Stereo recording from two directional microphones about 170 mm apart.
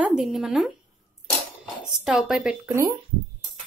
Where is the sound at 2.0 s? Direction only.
5° right (ahead or behind).